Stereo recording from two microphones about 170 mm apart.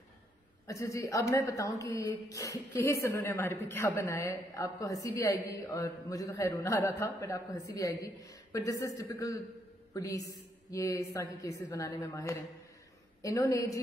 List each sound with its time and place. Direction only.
0.7 s a woman's voice: 20° left (ahead or behind)